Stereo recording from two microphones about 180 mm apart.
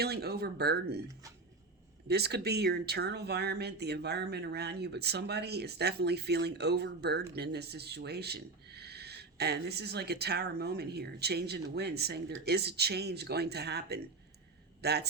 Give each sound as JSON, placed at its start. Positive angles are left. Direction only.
{"t": 0.0, "sound": "speech", "side_deg": -60}
{"t": 2.0, "sound": "a man's voice", "side_deg": -65}